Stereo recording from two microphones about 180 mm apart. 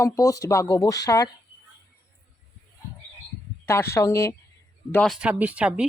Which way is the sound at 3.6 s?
15° left (ahead or behind).